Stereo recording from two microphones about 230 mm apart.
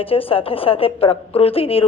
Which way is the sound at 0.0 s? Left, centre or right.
Left.